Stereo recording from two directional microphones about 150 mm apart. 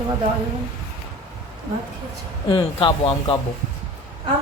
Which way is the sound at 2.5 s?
35° left (ahead or behind).